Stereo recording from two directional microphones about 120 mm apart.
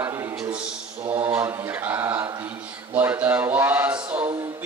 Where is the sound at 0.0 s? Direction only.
25° right (ahead or behind).